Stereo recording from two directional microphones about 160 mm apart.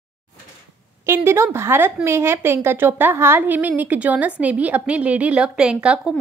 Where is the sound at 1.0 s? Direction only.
15° right (ahead or behind).